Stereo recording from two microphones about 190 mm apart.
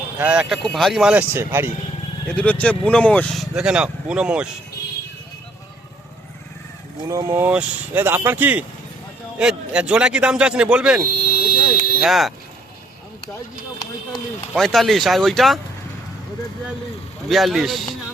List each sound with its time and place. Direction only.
0.2 s speech: 5° right (ahead or behind)
2.3 s speech: 5° left (ahead or behind)
7.0 s speech: 15° right (ahead or behind)
11.3 s fire alarm: 50° left (ahead or behind)
12.0 s speech: centre (ahead or behind)
14.1 s speech: centre (ahead or behind)
17.2 s speech: centre (ahead or behind)